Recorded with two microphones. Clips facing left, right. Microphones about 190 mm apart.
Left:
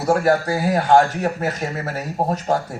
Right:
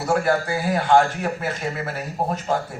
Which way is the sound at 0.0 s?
40° left (ahead or behind).